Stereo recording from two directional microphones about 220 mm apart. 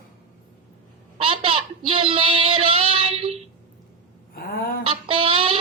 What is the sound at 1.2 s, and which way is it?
A child's voice, 25° right (ahead or behind).